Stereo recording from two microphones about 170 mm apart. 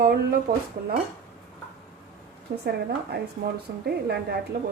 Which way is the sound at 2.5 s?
55° right (ahead or behind).